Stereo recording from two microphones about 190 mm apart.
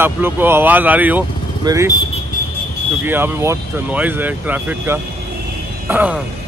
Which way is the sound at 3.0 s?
10° right (ahead or behind).